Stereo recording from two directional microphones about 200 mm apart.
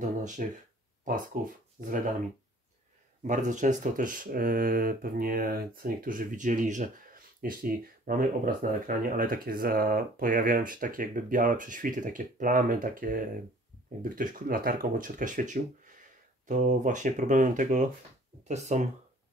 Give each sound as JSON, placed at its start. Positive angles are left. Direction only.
{"t": 0.0, "sound": "speech", "side_deg": -40}
{"t": 3.3, "sound": "speech", "side_deg": -40}